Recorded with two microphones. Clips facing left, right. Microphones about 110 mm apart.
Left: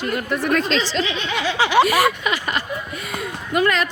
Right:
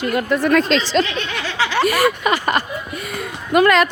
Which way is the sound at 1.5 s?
20° left (ahead or behind).